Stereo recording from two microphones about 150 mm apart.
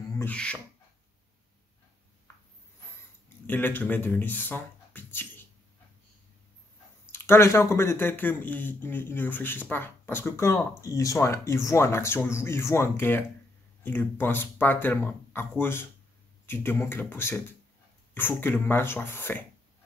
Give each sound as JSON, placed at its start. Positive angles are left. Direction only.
{"t": 0.2, "sound": "speech", "side_deg": 10}
{"t": 3.4, "sound": "speech", "side_deg": 15}
{"t": 7.1, "sound": "speech", "side_deg": 15}